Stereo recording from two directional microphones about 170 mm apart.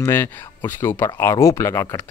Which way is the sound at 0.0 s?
15° left (ahead or behind).